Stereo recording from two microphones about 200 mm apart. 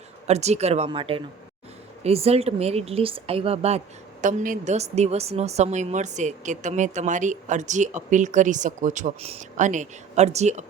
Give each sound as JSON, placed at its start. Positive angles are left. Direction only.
{"t": 0.3, "sound": "speech", "side_deg": -35}